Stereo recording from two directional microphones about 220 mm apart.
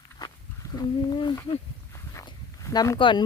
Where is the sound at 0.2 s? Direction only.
20° left (ahead or behind).